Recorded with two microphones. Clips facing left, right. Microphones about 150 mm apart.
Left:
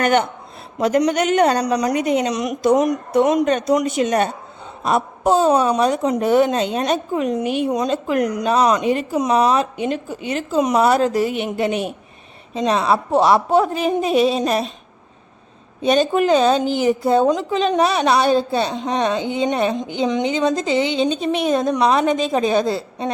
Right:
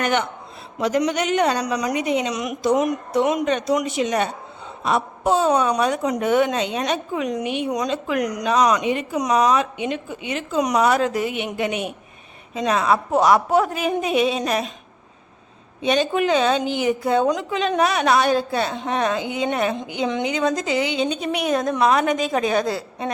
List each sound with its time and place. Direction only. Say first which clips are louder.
0.0 s a woman's voice: left 5 dB; 50° left (ahead or behind); by 14.7 s 35° left (ahead or behind)
15.8 s a woman's voice: left 4 dB; 40° left (ahead or behind); by 23.1 s 25° left (ahead or behind)